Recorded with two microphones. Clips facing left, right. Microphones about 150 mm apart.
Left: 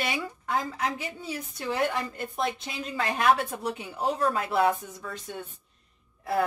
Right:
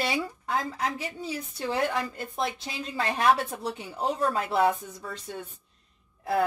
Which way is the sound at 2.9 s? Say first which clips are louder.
Even; 30° right (ahead or behind).